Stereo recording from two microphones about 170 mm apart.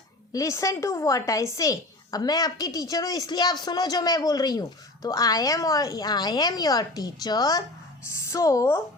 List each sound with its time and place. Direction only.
0.3 s a woman's voice: 20° left (ahead or behind)